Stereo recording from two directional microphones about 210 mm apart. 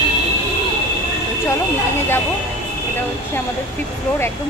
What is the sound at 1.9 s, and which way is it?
Speech, 10° left (ahead or behind).